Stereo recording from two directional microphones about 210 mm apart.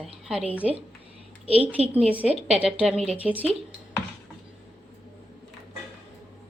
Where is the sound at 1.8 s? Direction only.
30° right (ahead or behind).